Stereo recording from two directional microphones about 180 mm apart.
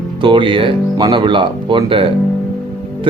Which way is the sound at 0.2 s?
25° right (ahead or behind).